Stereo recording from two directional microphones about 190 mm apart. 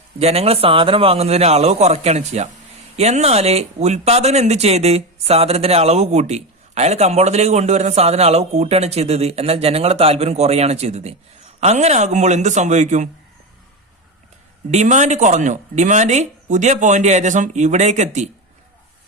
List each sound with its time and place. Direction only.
0.2 s speech: 35° right (ahead or behind)
14.7 s speech: 40° right (ahead or behind)